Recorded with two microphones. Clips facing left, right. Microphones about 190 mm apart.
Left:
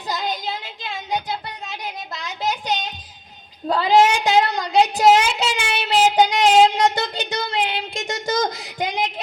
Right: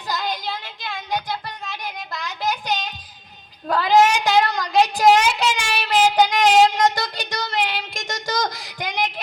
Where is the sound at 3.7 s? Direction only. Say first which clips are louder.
Left 1 dB; 20° left (ahead or behind).